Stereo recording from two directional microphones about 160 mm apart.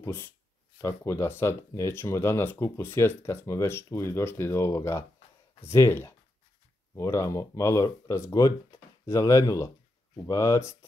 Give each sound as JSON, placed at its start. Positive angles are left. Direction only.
{"t": 0.0, "sound": "speech", "side_deg": 15}